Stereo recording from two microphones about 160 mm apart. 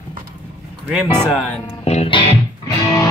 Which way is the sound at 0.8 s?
5° right (ahead or behind).